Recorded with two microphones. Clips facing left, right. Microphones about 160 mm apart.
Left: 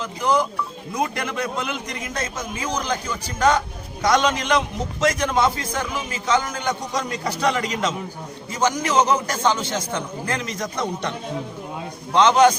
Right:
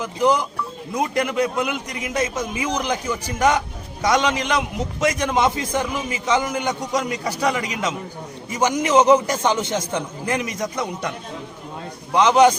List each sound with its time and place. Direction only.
0.0 s a man's voice: 15° right (ahead or behind)
12.1 s a man's voice: 10° right (ahead or behind)